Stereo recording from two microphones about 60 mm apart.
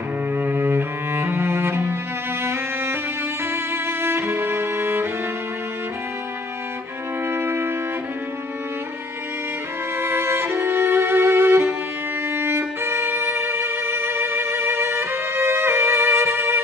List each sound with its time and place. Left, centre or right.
0.4 s cello: right
2.4 s music: right
7.2 s music: right
9.9 s music: right